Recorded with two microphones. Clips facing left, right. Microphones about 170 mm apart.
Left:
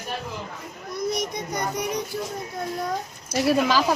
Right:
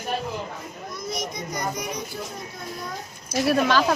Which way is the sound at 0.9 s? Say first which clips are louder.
Left 5 dB; 60° left (ahead or behind).